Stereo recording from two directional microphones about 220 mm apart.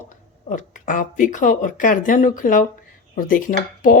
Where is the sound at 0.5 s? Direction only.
35° left (ahead or behind).